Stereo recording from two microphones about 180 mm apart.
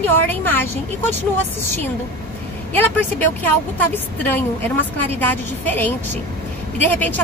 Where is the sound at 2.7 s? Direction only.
10° left (ahead or behind).